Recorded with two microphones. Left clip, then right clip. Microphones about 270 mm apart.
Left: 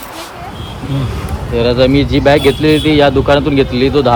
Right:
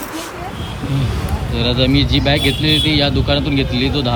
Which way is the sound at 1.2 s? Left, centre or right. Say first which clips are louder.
Left 8 dB; centre.